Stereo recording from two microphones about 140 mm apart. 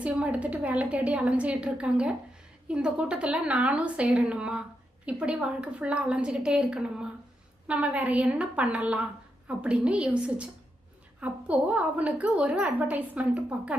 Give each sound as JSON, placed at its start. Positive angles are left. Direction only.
{"t": 0.0, "sound": "a woman's voice", "side_deg": -10}